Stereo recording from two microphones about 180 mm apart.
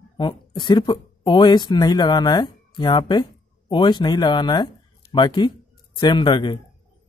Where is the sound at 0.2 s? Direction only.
25° left (ahead or behind).